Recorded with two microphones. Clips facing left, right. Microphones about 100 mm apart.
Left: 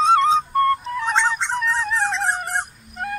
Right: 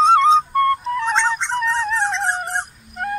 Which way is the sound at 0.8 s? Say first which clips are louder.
Right 2 dB; 5° left (ahead or behind).